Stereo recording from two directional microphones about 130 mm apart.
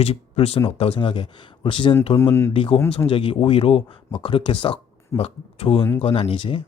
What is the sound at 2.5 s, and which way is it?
Speech, 45° left (ahead or behind).